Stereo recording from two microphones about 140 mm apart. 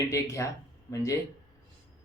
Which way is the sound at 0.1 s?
20° left (ahead or behind).